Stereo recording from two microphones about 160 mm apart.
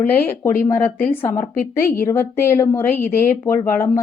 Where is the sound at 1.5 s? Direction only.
60° left (ahead or behind).